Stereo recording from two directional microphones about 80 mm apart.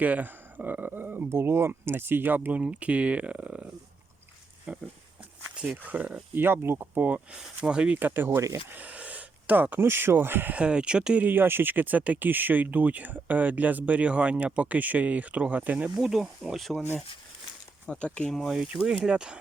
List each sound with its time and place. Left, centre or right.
0.0 s speech: right
5.5 s speech: centre
7.6 s speech: centre
7.9 s speech: right
10.6 s speech: centre
16.0 s speech: centre
17.8 s speech: centre
18.3 s speech: centre
18.5 s speech: centre